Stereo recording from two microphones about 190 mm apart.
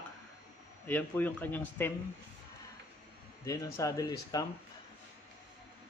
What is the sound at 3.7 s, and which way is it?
Speech, 20° left (ahead or behind).